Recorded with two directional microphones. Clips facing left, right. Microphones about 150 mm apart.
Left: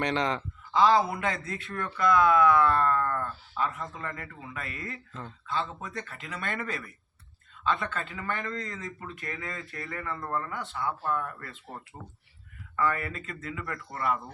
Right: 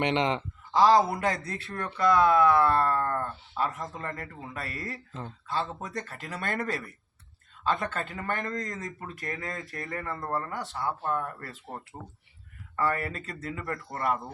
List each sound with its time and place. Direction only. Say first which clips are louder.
0.0 s speech: right 2 dB; 20° right (ahead or behind)
0.7 s speech: right 2 dB; 40° right (ahead or behind)
12.7 s speech: even; 40° right (ahead or behind)